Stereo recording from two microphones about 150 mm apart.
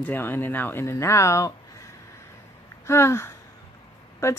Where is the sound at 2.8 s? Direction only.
15° left (ahead or behind).